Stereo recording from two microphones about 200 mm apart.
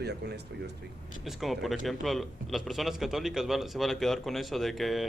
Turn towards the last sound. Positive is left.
turn(degrees=0)  # may be behind; listen again after turning